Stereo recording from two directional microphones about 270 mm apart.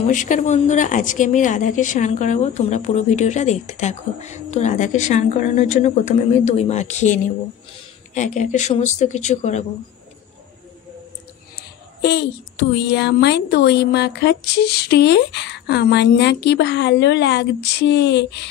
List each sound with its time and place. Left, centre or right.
0.0 s speech: left
12.0 s a woman's voice: left